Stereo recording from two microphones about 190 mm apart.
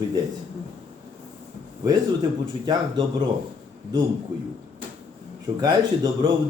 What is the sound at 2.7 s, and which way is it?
Speech, 20° right (ahead or behind).